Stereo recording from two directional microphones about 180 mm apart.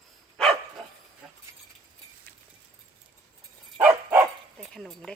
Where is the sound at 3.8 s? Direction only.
10° right (ahead or behind).